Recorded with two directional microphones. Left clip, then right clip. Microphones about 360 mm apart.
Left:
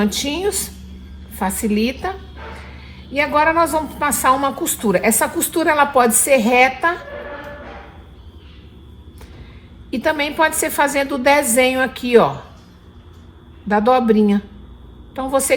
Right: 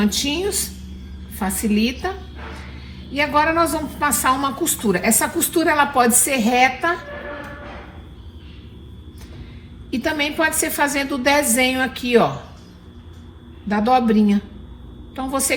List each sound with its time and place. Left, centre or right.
0.0 s a woman's voice: left
3.2 s a woman's voice: left
10.1 s a woman's voice: left
13.7 s a woman's voice: centre